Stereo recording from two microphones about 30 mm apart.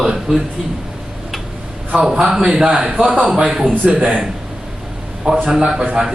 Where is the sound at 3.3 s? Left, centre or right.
Right.